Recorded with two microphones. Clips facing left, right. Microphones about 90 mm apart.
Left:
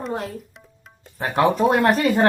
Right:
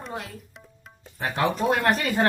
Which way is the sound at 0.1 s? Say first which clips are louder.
Left 5 dB; 45° left (ahead or behind).